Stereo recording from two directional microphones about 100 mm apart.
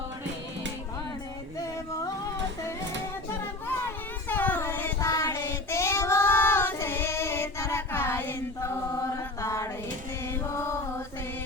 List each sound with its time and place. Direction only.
3.7 s a sound: 20° left (ahead or behind)
4.9 s child singing: 35° left (ahead or behind)
10.5 s mantra: 25° left (ahead or behind)